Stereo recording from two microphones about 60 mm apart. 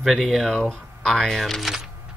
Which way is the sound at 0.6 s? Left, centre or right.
Centre.